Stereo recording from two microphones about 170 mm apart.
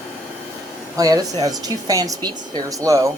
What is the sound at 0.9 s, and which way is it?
Speech, 20° right (ahead or behind).